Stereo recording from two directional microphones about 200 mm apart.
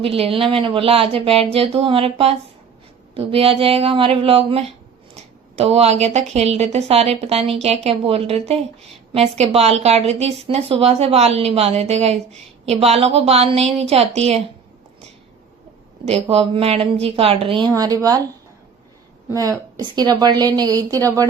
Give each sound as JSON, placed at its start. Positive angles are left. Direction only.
{"t": 0.0, "sound": "a woman's voice", "side_deg": -30}
{"t": 16.3, "sound": "a woman's voice", "side_deg": -30}
{"t": 19.3, "sound": "a woman's voice", "side_deg": -15}